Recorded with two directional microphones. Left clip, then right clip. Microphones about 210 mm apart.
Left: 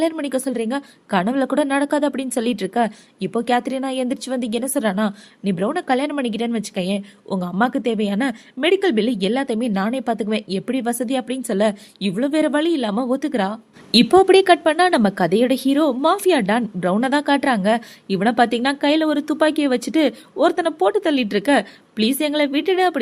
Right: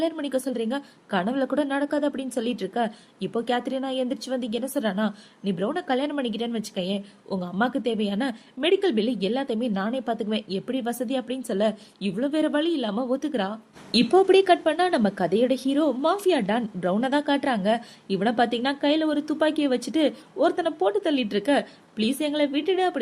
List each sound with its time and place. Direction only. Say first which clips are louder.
0.0 s a woman's voice: left 5 dB; 30° left (ahead or behind)